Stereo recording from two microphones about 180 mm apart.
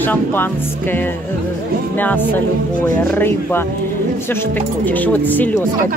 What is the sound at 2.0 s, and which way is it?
Speech, 10° left (ahead or behind).